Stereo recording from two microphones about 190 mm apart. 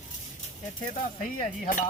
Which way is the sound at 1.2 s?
45° left (ahead or behind).